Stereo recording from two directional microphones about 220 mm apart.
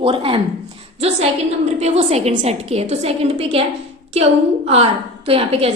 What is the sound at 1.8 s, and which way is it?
A woman's voice, 30° right (ahead or behind).